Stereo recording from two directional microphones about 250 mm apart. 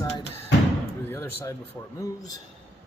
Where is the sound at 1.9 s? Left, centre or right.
Centre.